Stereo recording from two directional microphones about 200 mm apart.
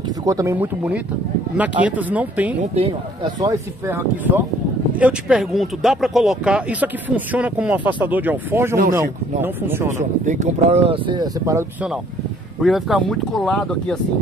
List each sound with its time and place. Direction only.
0.2 s speech: 15° right (ahead or behind)
2.6 s speech: 30° right (ahead or behind)
3.3 s speech: 15° right (ahead or behind)
9.9 s speech: 35° right (ahead or behind); by 11.6 s 20° right (ahead or behind)
12.6 s speech: centre (ahead or behind)